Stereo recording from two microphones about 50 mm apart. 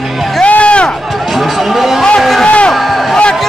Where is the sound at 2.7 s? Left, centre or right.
Centre.